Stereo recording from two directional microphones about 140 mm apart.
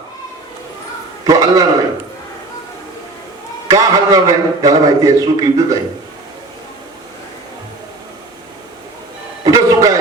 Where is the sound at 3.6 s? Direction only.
25° right (ahead or behind).